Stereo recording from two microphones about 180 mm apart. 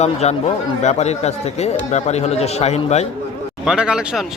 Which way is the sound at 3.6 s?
5° right (ahead or behind).